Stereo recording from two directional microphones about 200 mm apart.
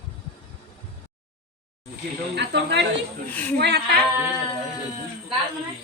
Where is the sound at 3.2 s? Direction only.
10° left (ahead or behind).